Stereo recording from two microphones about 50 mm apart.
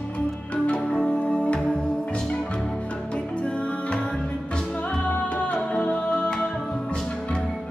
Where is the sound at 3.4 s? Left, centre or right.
Left.